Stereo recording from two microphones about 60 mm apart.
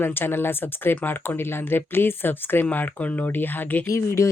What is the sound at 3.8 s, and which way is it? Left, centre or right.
Speech, left.